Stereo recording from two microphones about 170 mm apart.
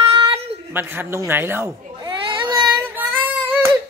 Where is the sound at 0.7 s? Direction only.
10° right (ahead or behind).